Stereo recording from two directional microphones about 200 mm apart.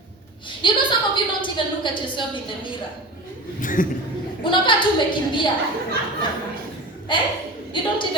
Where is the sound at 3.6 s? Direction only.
40° left (ahead or behind).